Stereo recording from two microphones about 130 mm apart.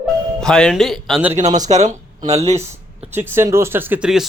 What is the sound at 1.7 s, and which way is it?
Speech, 50° right (ahead or behind).